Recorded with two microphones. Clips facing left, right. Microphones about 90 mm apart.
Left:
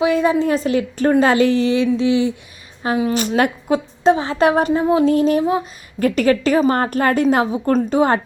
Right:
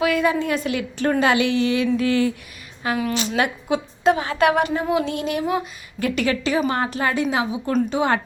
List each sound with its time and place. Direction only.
0.0 s a woman's voice: 30° left (ahead or behind)
2.0 s a woman's voice: 20° left (ahead or behind)
3.2 s a woman's voice: 45° left (ahead or behind)
4.0 s a woman's voice: 30° left (ahead or behind)
6.0 s a woman's voice: 40° left (ahead or behind)